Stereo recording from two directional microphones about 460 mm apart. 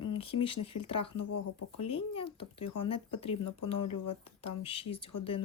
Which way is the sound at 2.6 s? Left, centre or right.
Left.